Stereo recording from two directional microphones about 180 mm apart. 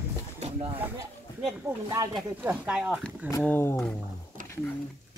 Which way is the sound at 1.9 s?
20° right (ahead or behind).